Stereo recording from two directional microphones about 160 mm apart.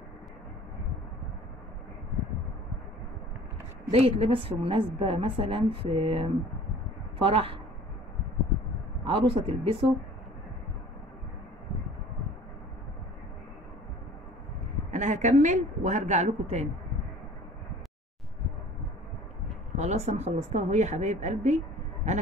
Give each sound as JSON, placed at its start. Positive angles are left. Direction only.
{"t": 3.9, "sound": "a woman's voice", "side_deg": -40}
{"t": 9.0, "sound": "a woman's voice", "side_deg": -30}
{"t": 14.9, "sound": "speech", "side_deg": -50}
{"t": 19.8, "sound": "speech", "side_deg": -45}